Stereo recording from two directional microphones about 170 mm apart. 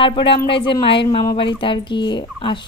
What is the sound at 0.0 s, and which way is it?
A woman's voice, 30° left (ahead or behind).